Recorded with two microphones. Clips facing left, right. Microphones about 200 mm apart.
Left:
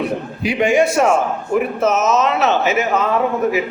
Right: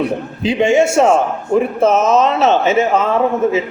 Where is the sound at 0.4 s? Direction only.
25° right (ahead or behind).